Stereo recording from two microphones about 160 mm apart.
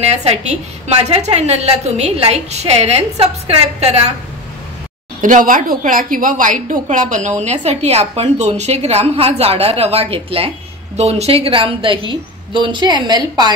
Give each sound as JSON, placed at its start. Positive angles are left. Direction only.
{"t": 0.0, "sound": "a woman's voice", "side_deg": -45}
{"t": 5.2, "sound": "a woman's voice", "side_deg": -55}